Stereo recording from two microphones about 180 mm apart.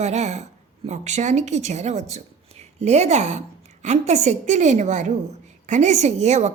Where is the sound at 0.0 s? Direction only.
40° right (ahead or behind).